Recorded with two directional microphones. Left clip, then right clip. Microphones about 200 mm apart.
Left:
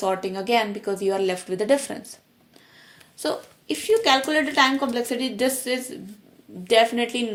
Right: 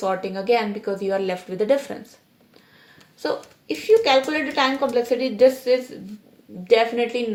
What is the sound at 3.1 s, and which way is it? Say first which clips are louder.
A woman's voice: right 1 dB; 35° left (ahead or behind).